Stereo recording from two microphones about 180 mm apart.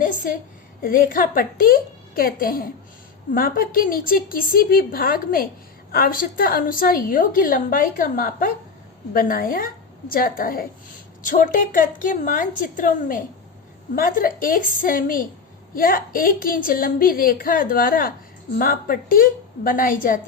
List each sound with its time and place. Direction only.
0.0 s a woman's voice: 50° left (ahead or behind)